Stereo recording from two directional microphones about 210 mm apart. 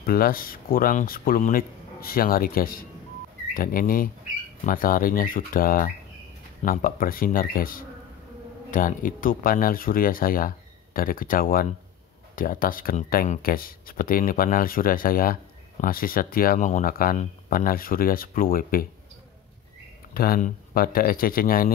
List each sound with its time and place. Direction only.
0.0 s speech: 45° left (ahead or behind)
20.2 s speech: 40° left (ahead or behind)